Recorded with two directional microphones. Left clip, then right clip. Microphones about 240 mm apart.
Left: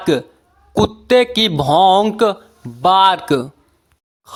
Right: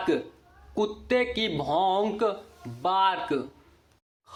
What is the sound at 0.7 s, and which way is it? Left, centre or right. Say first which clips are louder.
Speech: left 13 dB; left.